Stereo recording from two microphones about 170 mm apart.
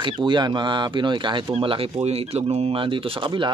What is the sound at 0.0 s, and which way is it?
Speech, 30° right (ahead or behind).